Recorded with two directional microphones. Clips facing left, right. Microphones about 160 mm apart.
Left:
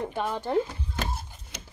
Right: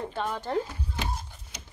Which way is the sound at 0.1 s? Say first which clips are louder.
Left 2 dB; 10° left (ahead or behind).